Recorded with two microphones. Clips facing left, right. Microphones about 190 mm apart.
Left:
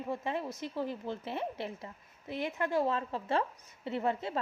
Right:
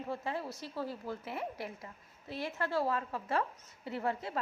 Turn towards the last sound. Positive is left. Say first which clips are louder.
# left 3 dB
turn(degrees=25)  # may be behind; listen again after turning